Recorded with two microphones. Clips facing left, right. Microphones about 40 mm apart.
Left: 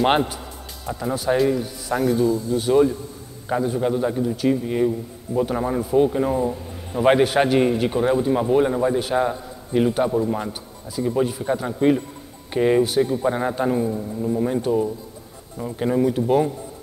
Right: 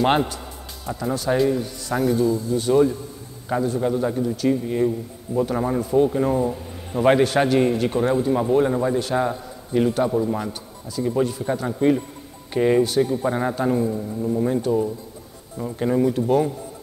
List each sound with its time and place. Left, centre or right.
0.8 s a man's voice: centre
7.1 s a man's voice: centre